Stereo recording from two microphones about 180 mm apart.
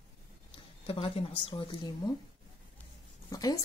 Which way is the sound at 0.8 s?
30° left (ahead or behind).